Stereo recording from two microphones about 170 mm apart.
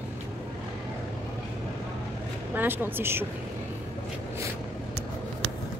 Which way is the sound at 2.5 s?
10° right (ahead or behind).